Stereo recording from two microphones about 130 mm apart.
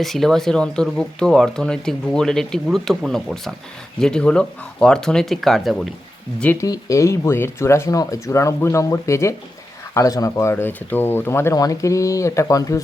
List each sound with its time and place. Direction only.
0.0 s speech: centre (ahead or behind)
6.4 s speech: 15° left (ahead or behind)